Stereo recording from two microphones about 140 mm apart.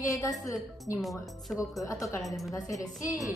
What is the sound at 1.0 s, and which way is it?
Speech, centre (ahead or behind).